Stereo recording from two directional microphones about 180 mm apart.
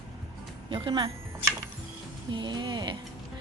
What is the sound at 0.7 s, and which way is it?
Speech, 25° right (ahead or behind).